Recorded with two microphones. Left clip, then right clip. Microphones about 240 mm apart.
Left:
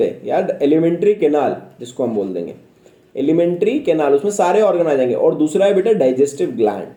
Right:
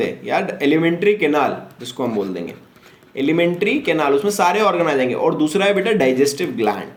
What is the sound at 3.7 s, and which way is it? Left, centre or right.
Speech, right.